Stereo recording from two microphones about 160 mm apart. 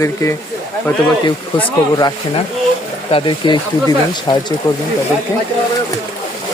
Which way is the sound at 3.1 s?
30° left (ahead or behind).